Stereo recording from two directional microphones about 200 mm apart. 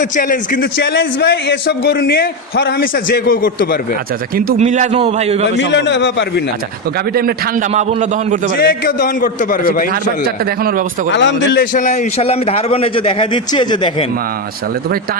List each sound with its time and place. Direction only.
0.0 s a man's voice: 40° left (ahead or behind)
0.8 s a man's voice: 60° left (ahead or behind); by 3.8 s 45° left (ahead or behind)
4.5 s a man's voice: 35° right (ahead or behind)
5.5 s a man's voice: 60° left (ahead or behind)
7.7 s a man's voice: 35° right (ahead or behind)
8.5 s a man's voice: 50° left (ahead or behind)
11.1 s a man's voice: 65° left (ahead or behind)
11.7 s a man's voice: 40° left (ahead or behind); by 13.9 s 20° left (ahead or behind)